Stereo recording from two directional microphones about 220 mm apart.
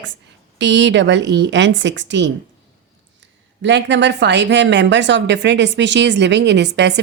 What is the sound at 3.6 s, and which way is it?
Speech, 55° right (ahead or behind).